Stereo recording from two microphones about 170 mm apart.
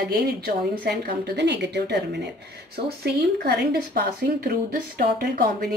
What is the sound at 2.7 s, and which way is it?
Speech, 65° right (ahead or behind).